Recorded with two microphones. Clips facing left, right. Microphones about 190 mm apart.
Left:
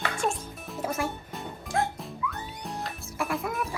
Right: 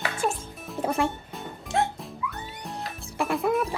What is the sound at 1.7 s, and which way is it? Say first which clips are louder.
Music: right 2 dB; 25° right (ahead or behind).